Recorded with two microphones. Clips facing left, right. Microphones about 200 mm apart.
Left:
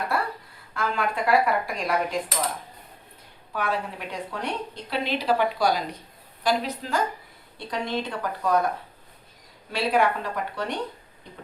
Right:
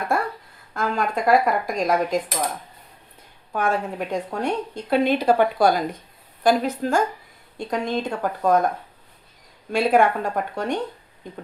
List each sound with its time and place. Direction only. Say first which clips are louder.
0.1 s a sound: right 4 dB; 45° right (ahead or behind)
0.7 s a woman's voice: right 3 dB; 45° right (ahead or behind)
3.5 s a woman's voice: right 5 dB; 45° right (ahead or behind)
9.7 s a woman's voice: right 5 dB; 50° right (ahead or behind)